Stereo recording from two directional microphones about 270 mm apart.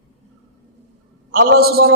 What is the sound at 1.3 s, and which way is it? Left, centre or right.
Speech, right.